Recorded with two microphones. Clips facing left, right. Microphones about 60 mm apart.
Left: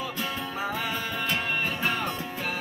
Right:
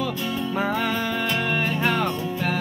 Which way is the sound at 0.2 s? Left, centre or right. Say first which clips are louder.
Right 5 dB; centre.